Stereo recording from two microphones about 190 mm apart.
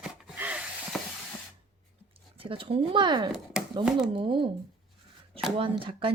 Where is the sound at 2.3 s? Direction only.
30° right (ahead or behind).